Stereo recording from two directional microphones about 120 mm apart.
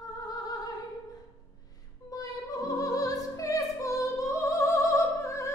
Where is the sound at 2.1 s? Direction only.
30° left (ahead or behind).